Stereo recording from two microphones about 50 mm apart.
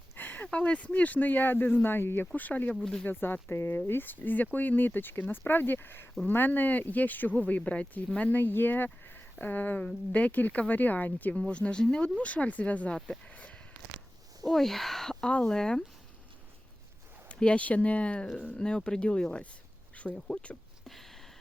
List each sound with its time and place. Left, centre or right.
0.2 s a sound: left
0.4 s speech: left
2.3 s speech: left
3.1 s speech: left
8.4 s speech: left
11.3 s speech: left
13.3 s a sound: left
14.4 s speech: centre
17.2 s speech: left
20.8 s a sound: centre